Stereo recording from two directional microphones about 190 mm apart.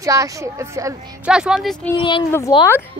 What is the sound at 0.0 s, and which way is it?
Speech, 15° right (ahead or behind).